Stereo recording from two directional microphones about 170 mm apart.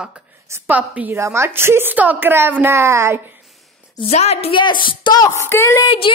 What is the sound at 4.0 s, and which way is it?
Speech, 40° left (ahead or behind).